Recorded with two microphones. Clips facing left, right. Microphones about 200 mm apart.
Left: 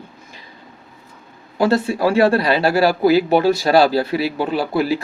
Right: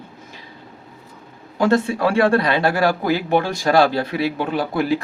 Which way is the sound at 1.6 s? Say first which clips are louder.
Left 1 dB; 35° left (ahead or behind).